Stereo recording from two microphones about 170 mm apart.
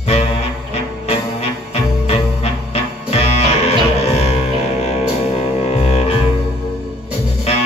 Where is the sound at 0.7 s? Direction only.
40° left (ahead or behind).